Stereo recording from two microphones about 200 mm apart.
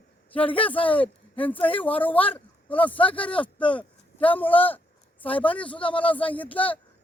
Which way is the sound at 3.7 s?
5° left (ahead or behind).